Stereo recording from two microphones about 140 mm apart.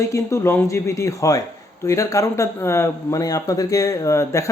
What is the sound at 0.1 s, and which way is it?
A man's voice, 20° left (ahead or behind).